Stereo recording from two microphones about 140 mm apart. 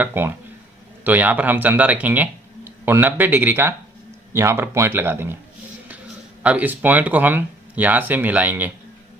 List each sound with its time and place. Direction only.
0.0 s speech: 15° right (ahead or behind)
6.4 s speech: 10° right (ahead or behind)